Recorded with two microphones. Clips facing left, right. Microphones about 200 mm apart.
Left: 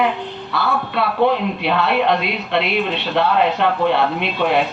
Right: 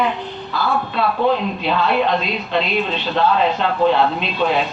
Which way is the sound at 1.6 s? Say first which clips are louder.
Left 1 dB; 65° left (ahead or behind).